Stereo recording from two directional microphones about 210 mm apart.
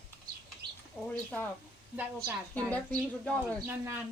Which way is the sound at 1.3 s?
5° left (ahead or behind).